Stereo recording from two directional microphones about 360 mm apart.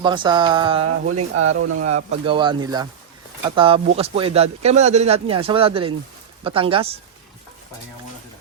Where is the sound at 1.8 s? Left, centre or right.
Centre.